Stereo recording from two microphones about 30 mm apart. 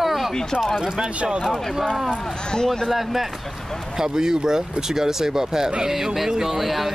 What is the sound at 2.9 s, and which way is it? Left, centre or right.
Speech, centre.